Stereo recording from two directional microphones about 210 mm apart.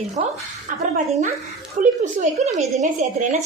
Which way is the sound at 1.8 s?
35° right (ahead or behind).